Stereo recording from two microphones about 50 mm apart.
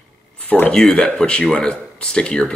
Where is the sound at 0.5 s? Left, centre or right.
Left.